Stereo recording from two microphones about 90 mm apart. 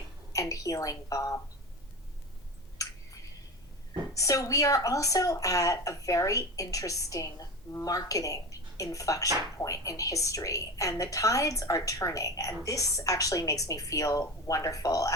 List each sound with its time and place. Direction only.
0.3 s a woman's voice: 40° left (ahead or behind)
4.1 s a woman's voice: 40° left (ahead or behind)